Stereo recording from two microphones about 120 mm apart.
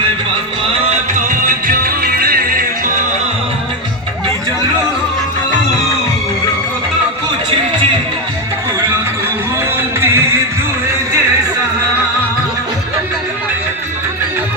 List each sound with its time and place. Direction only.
10.0 s music: 20° right (ahead or behind)